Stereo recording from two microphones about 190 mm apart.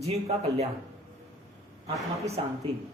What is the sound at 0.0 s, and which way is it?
Speech, 35° right (ahead or behind).